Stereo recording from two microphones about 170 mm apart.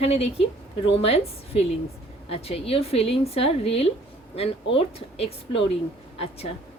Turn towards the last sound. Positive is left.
turn(degrees=35)  # may be behind; listen again after turning